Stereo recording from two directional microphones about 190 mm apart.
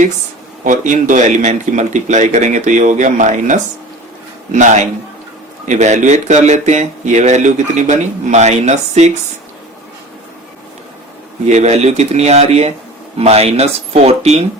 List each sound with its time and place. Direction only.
0.6 s speech: 40° right (ahead or behind)
11.4 s speech: 35° right (ahead or behind)